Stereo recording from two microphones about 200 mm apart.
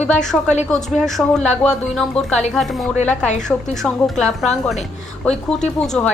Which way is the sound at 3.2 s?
35° left (ahead or behind).